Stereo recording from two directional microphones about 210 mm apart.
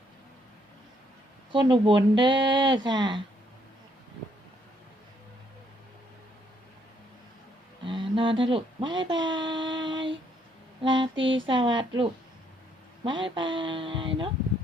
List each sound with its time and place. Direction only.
1.5 s speech: 20° right (ahead or behind)
7.9 s speech: 25° right (ahead or behind)
11.1 s mantra: 60° right (ahead or behind)
11.4 s speech: 25° right (ahead or behind)